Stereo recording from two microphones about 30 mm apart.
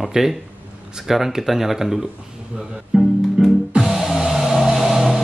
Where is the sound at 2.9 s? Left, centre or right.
Right.